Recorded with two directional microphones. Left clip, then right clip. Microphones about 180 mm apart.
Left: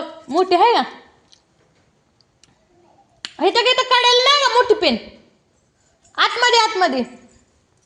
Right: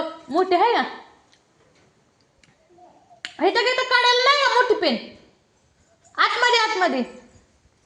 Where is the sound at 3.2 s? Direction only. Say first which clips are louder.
Left 4 dB; 15° left (ahead or behind).